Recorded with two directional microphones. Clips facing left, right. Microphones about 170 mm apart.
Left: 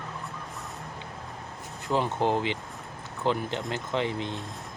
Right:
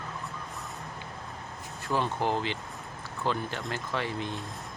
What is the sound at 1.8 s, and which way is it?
Speech, 20° left (ahead or behind).